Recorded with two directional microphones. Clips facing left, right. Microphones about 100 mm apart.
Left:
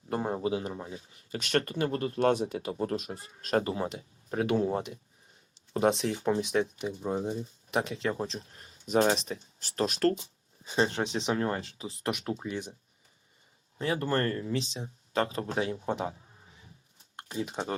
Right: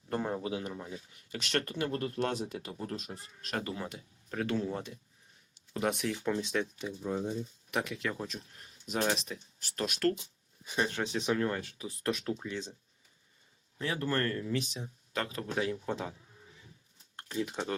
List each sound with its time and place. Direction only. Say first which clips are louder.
0.1 s speech: left 4 dB; 25° left (ahead or behind)
1.4 s speech: left 4 dB; 45° left (ahead or behind)
2.1 s speech: left 7 dB; 55° left (ahead or behind)
3.6 s speech: left 6 dB; 30° left (ahead or behind); by 12.7 s 15° left (ahead or behind)
13.7 s speech: left 4 dB; 25° left (ahead or behind)
16.0 s a sound: left 5 dB; 30° left (ahead or behind)
17.2 s speech: left 1 dB; 20° left (ahead or behind)